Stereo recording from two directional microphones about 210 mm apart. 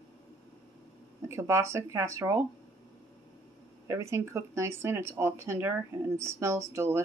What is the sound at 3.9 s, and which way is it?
Speech, 15° right (ahead or behind).